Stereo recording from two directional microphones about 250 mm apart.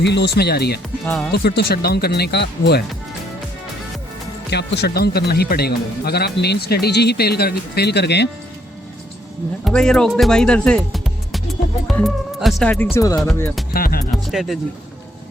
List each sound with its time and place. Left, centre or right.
0.0 s speech: left
1.0 s speech: centre
1.5 s speech: left
4.4 s speech: left
9.6 s speech: centre
13.7 s speech: left
14.3 s speech: centre